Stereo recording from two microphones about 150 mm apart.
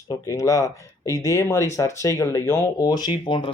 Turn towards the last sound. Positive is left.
turn(degrees=30)  # may be behind; listen again after turning